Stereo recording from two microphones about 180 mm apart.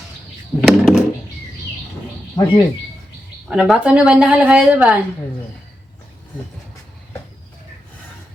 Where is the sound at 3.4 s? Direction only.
5° right (ahead or behind).